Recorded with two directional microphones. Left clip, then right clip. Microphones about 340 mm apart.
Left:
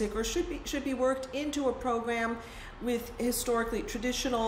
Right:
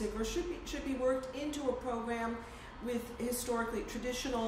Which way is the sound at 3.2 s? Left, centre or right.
Left.